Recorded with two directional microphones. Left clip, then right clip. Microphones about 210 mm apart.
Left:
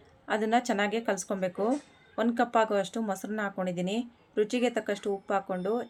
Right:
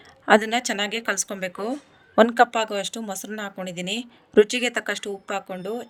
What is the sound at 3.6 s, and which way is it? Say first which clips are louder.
A woman's voice: right 3 dB; 55° right (ahead or behind).